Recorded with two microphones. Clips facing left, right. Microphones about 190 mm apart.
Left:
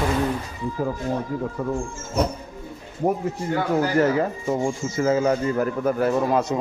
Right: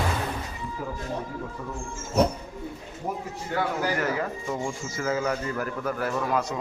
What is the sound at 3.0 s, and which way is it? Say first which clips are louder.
Speech: left 10 dB; 60° left (ahead or behind).